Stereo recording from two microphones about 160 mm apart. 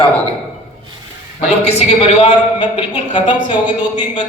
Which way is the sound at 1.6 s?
40° left (ahead or behind).